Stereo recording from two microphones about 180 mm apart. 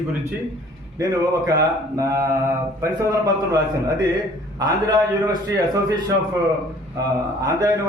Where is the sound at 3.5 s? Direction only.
20° right (ahead or behind).